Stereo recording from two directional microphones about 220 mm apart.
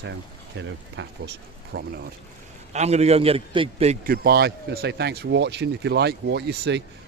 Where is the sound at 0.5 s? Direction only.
55° right (ahead or behind).